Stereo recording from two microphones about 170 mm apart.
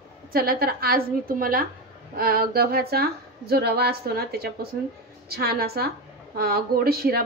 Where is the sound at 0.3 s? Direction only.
60° right (ahead or behind).